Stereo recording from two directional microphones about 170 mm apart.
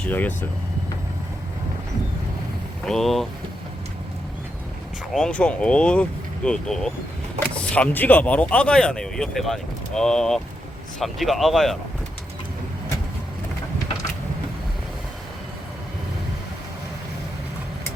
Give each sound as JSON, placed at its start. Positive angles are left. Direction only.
{"t": 0.0, "sound": "speech", "side_deg": 10}
{"t": 2.8, "sound": "speech", "side_deg": 0}
{"t": 5.1, "sound": "speech", "side_deg": 5}